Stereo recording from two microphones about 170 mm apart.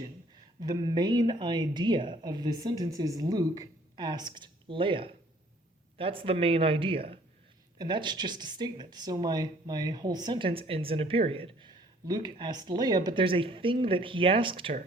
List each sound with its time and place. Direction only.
0.6 s speech: 25° right (ahead or behind)